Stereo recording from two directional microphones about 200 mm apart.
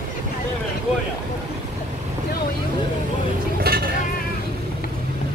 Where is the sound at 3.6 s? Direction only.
50° right (ahead or behind).